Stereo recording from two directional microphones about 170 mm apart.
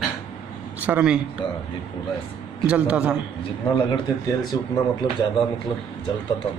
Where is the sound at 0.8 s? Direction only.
10° right (ahead or behind).